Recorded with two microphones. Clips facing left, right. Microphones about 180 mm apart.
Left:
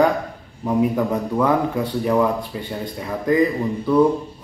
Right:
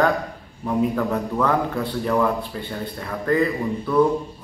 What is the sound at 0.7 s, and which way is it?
A man's voice, 15° left (ahead or behind).